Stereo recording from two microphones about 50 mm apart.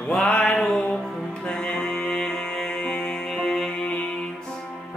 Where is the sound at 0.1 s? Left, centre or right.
Centre.